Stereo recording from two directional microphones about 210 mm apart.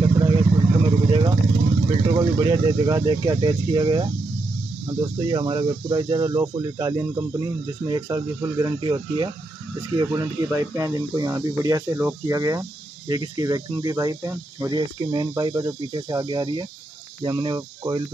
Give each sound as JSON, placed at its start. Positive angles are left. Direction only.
{"t": 0.0, "sound": "vehicle", "side_deg": -20}
{"t": 2.1, "sound": "speech", "side_deg": -20}